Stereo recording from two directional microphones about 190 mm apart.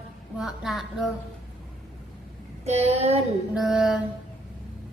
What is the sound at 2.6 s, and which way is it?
Child singing, 35° right (ahead or behind).